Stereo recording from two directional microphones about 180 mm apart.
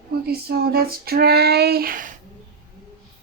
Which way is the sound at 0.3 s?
60° right (ahead or behind).